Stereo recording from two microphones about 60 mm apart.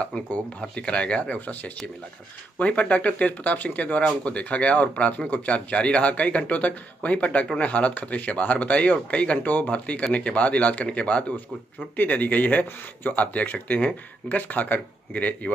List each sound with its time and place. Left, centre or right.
0.6 s speech: centre